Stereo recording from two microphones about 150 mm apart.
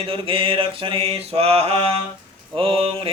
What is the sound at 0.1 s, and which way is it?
Mantra, 40° right (ahead or behind).